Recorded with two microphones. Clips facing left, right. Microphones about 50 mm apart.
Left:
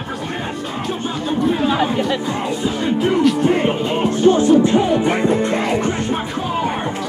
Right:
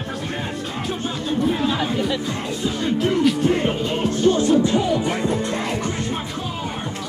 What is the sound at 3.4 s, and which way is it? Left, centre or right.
Music, left.